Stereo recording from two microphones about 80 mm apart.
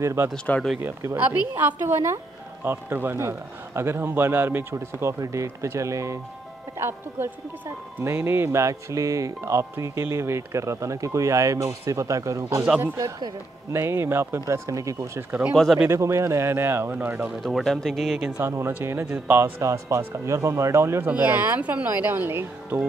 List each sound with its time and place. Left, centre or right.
0.0 s speech: right
1.1 s speech: right
6.8 s speech: right
14.4 s speech: right
15.5 s speech: centre
15.9 s speech: right
16.9 s speech: centre
17.4 s speech: centre
18.4 s speech: right
19.6 s speech: right
21.1 s speech: right